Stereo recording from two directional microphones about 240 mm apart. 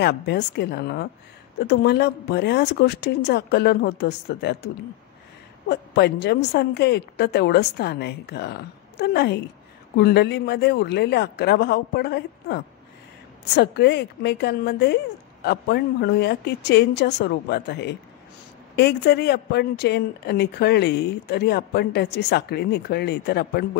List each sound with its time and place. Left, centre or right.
0.0 s speech: left
5.7 s speech: left